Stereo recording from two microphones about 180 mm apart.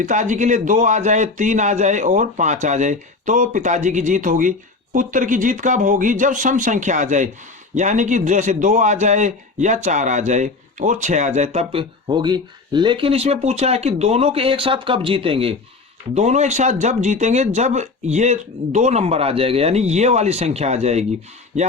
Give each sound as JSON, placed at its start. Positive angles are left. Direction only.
{"t": 0.0, "sound": "a man's voice", "side_deg": -45}